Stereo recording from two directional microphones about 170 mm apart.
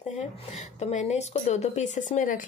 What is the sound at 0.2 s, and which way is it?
A woman's voice, 40° left (ahead or behind).